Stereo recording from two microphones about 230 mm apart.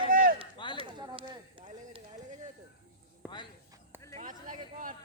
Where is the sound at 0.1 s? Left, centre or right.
Right.